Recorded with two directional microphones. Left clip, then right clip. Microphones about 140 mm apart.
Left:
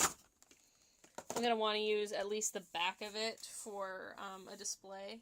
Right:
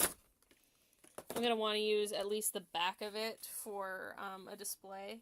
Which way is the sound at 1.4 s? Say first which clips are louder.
Even; 30° right (ahead or behind).